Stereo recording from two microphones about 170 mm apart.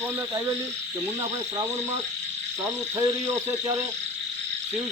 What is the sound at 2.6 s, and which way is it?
Speech, 15° right (ahead or behind).